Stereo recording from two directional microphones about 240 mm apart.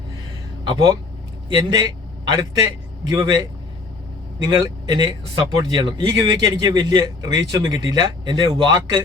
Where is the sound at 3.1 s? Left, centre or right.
Centre.